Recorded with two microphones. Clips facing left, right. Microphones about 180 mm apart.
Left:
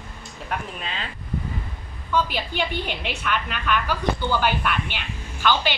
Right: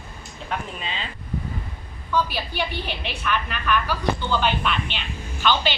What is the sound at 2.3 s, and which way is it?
A woman's voice, 15° left (ahead or behind).